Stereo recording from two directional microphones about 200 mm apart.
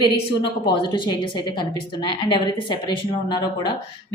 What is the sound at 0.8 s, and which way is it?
A woman's voice, 25° left (ahead or behind).